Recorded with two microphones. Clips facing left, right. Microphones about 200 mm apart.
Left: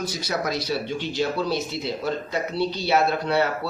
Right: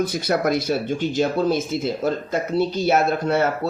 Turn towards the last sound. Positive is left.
turn(degrees=-50)  # may be behind; listen again after turning